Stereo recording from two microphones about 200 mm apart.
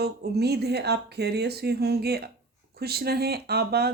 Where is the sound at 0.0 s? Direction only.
55° right (ahead or behind).